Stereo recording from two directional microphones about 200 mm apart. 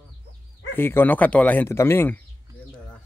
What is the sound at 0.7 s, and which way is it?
Speech, 10° left (ahead or behind).